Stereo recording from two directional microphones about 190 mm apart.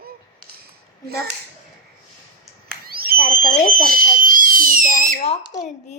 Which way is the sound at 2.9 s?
50° right (ahead or behind).